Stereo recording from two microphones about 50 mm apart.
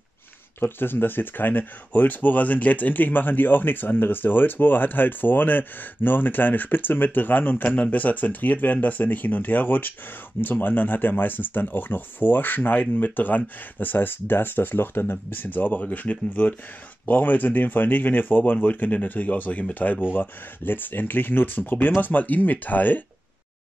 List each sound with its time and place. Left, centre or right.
0.6 s speech: left